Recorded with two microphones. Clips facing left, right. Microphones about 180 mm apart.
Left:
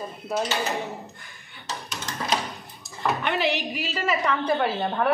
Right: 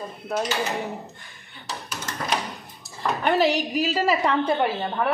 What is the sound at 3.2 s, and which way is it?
A woman's voice, 40° right (ahead or behind).